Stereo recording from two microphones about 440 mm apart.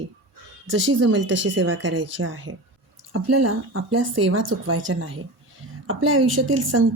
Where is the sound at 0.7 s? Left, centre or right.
Right.